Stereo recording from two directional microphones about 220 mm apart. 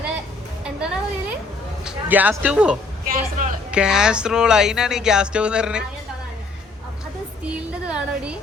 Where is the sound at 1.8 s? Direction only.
5° right (ahead or behind).